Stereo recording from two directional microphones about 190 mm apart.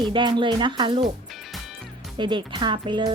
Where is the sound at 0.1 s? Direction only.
25° right (ahead or behind).